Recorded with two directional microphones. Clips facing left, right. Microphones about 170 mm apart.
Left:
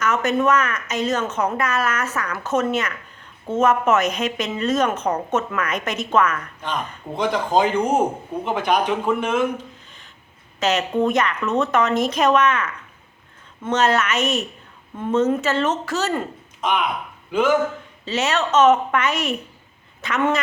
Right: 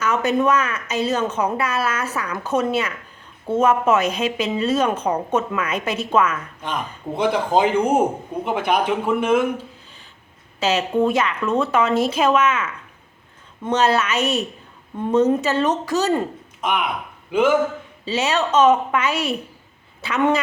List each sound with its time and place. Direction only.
0.0 s a woman's voice: 10° right (ahead or behind)
10.6 s a woman's voice: 10° right (ahead or behind)
14.2 s a woman's voice: 35° right (ahead or behind)
14.9 s a woman's voice: 15° right (ahead or behind)
19.1 s a woman's voice: 35° right (ahead or behind)
20.0 s a woman's voice: 10° right (ahead or behind)